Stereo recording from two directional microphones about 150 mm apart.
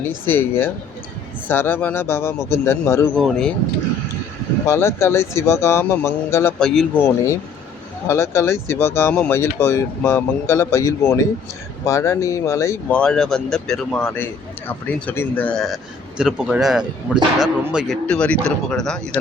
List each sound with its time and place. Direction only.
0.3 s speech: 15° left (ahead or behind)
3.2 s a man's voice: 5° left (ahead or behind)
4.6 s speech: 20° left (ahead or behind)
6.6 s a man's voice: 5° left (ahead or behind)
8.0 s speech: 15° left (ahead or behind)
12.9 s a man's voice: 5° left (ahead or behind)
18.0 s speech: 10° left (ahead or behind)